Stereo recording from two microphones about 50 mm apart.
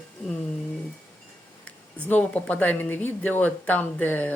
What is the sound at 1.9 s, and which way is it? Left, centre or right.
Speech, left.